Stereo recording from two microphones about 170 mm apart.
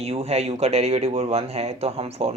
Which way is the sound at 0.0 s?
35° right (ahead or behind).